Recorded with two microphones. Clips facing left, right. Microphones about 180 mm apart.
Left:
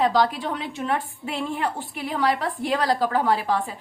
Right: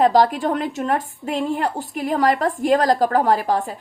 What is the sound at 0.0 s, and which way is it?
A woman's voice, 45° right (ahead or behind).